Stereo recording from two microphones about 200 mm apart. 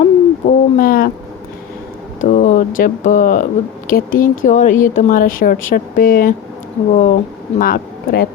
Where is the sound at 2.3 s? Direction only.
40° left (ahead or behind).